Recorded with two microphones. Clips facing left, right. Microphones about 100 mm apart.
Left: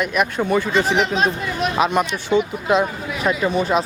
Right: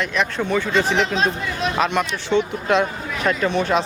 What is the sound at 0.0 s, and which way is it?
Speech, 10° left (ahead or behind).